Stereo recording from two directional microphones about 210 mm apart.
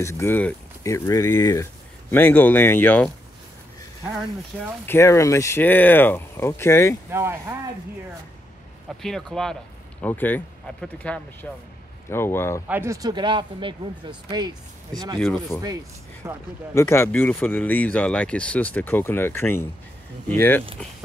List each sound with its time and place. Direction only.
0.0 s speech: 10° left (ahead or behind)
4.8 s speech: 15° left (ahead or behind)
7.1 s speech: 10° right (ahead or behind)
9.0 s speech: centre (ahead or behind)
12.6 s speech: 10° right (ahead or behind)
15.1 s speech: 10° left (ahead or behind)
16.2 s speech: 15° right (ahead or behind)
16.7 s speech: 10° left (ahead or behind)